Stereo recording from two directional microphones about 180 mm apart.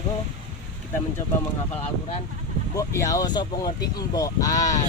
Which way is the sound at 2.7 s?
15° left (ahead or behind).